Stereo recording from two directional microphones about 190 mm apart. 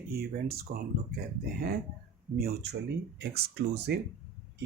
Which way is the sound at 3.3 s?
60° right (ahead or behind).